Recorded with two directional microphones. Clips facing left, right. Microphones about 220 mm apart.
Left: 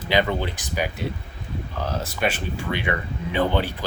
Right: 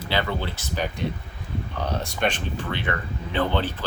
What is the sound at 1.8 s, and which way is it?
Speech, centre (ahead or behind).